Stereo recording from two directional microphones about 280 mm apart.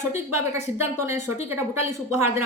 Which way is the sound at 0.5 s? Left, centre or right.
Centre.